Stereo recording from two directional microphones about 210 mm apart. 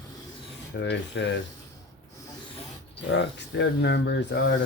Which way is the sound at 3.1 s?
55° left (ahead or behind).